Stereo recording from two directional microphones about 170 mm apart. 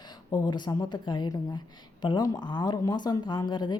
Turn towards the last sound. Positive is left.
turn(degrees=25)  # may be behind; listen again after turning